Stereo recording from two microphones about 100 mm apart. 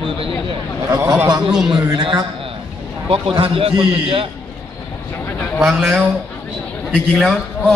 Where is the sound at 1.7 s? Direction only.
55° right (ahead or behind).